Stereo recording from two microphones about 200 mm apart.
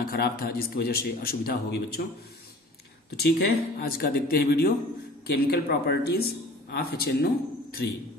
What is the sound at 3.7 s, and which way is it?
A man's voice, 50° left (ahead or behind).